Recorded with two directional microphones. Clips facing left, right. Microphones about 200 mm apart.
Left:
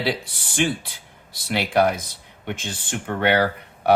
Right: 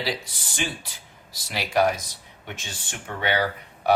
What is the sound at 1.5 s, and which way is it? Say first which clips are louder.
Speech: left 3 dB; 60° left (ahead or behind).